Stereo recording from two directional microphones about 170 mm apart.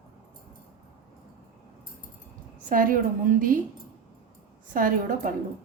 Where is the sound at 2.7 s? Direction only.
55° right (ahead or behind).